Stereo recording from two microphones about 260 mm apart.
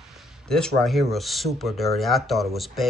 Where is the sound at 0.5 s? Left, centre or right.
Centre.